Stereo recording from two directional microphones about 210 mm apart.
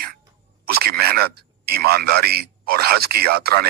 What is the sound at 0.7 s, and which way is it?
A man's voice, 45° right (ahead or behind).